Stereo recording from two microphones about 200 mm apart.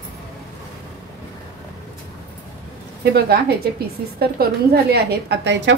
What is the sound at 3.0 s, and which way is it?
A woman's voice, 55° right (ahead or behind).